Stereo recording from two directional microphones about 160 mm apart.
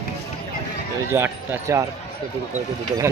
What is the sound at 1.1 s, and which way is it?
Speech, 15° right (ahead or behind).